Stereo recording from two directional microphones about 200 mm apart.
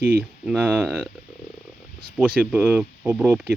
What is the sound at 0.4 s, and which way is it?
Speech, 10° right (ahead or behind).